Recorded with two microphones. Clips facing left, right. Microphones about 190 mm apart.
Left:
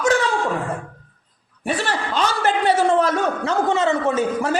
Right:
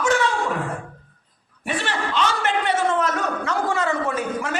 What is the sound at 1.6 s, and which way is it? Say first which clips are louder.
A man's voice: left 3 dB; 40° left (ahead or behind).